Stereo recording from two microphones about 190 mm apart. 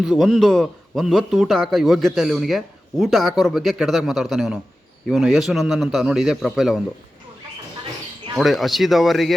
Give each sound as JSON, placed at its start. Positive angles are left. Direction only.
{"t": 0.0, "sound": "a man's voice", "side_deg": 0}
{"t": 8.4, "sound": "a man's voice", "side_deg": 0}